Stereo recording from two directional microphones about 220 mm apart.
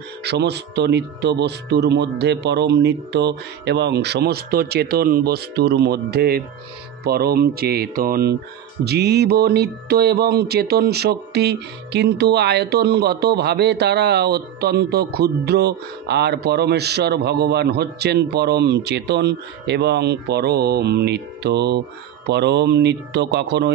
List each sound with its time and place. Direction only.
0.2 s music: 50° right (ahead or behind)